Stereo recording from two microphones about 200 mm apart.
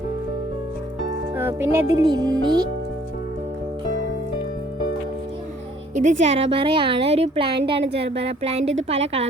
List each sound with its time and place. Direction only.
1.4 s a woman's voice: 10° right (ahead or behind)
6.0 s a woman's voice: 35° right (ahead or behind)